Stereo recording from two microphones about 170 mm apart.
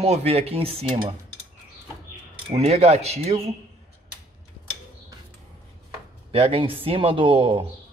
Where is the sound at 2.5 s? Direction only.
40° right (ahead or behind).